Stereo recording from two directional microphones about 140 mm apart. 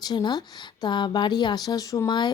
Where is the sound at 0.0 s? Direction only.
30° left (ahead or behind).